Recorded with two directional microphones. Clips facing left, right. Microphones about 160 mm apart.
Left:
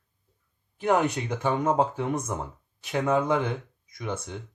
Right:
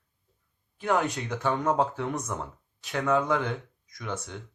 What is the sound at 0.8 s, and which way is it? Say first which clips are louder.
Speech: left 3 dB; 15° left (ahead or behind).